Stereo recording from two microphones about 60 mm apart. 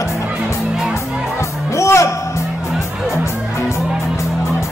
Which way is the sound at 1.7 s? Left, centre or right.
Left.